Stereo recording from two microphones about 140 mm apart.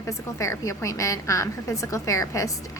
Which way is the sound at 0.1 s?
20° left (ahead or behind).